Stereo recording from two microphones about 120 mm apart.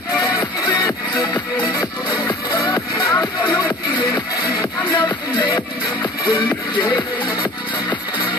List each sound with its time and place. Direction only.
0.2 s music: 35° left (ahead or behind)
6.7 s music: 35° left (ahead or behind)